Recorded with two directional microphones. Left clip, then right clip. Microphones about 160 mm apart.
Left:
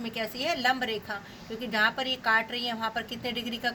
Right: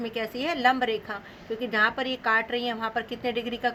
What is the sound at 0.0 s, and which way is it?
A woman's voice, 50° right (ahead or behind).